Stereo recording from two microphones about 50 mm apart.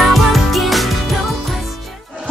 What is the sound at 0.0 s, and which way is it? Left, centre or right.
Music, centre.